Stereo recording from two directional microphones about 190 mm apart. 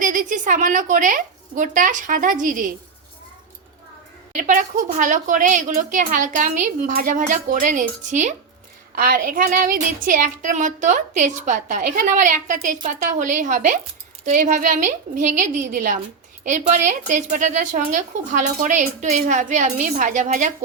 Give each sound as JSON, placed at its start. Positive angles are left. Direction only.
{"t": 0.0, "sound": "a woman's voice", "side_deg": -45}
{"t": 4.4, "sound": "child singing", "side_deg": -40}
{"t": 16.4, "sound": "a woman's voice", "side_deg": -40}